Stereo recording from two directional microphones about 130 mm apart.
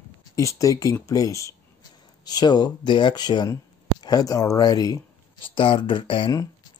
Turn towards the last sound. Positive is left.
turn(degrees=40)  # may be behind; listen again after turning